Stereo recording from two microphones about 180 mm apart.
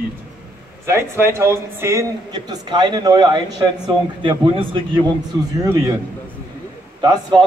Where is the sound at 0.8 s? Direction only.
15° right (ahead or behind).